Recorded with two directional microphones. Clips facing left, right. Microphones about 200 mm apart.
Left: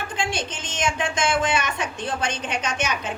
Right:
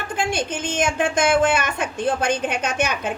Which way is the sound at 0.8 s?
55° right (ahead or behind).